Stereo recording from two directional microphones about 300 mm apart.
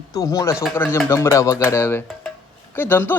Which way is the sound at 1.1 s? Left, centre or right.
Centre.